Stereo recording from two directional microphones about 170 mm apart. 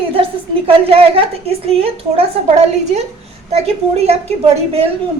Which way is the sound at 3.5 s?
40° right (ahead or behind).